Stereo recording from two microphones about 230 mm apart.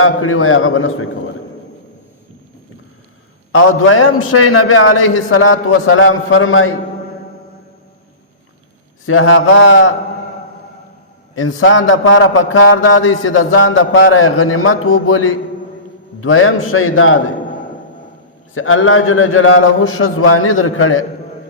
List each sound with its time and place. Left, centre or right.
0.0 s mantra: left
3.5 s mantra: left
9.0 s mantra: left
11.3 s mantra: left
18.5 s mantra: left